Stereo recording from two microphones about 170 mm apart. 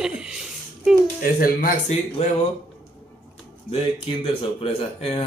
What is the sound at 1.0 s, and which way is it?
Speech, 50° left (ahead or behind).